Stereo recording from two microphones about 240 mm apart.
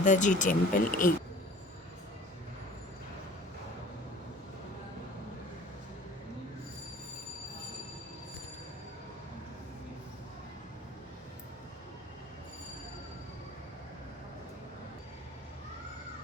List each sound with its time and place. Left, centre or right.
0.0 s speech: left